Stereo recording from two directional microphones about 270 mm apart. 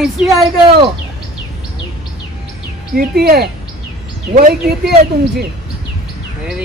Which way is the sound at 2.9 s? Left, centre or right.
Right.